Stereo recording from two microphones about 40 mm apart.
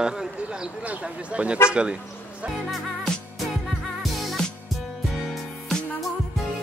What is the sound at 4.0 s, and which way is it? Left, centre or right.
Music, centre.